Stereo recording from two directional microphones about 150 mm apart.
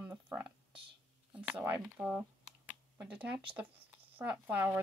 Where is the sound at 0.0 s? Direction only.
10° right (ahead or behind).